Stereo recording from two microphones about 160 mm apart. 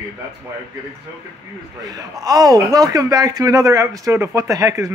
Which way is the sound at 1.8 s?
25° right (ahead or behind).